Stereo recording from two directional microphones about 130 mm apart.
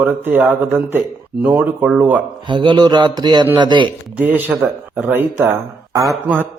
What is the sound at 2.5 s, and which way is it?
Mantra, 35° right (ahead or behind).